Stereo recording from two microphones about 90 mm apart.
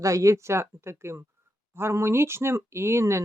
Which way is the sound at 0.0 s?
35° right (ahead or behind).